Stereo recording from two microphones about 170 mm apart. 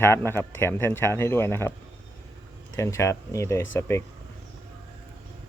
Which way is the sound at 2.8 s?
15° left (ahead or behind).